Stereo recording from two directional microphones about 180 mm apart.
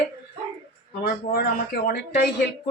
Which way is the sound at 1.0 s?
60° left (ahead or behind).